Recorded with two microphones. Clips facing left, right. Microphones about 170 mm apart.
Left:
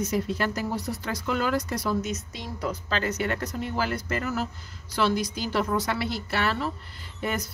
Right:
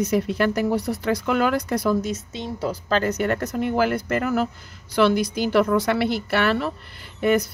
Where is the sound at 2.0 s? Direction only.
30° right (ahead or behind).